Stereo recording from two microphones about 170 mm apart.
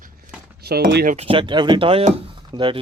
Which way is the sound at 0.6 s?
65° right (ahead or behind).